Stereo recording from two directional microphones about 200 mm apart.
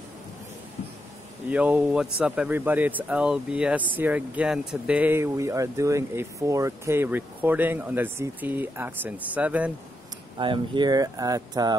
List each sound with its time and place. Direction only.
1.5 s speech: 5° right (ahead or behind)
10.3 s speech: 25° right (ahead or behind)